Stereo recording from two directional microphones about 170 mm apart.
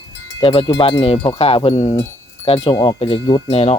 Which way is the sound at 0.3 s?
30° left (ahead or behind).